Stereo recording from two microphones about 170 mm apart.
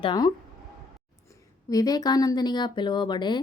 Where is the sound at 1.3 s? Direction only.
20° left (ahead or behind).